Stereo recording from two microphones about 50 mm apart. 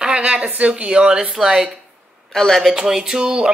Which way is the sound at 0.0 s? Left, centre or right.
Right.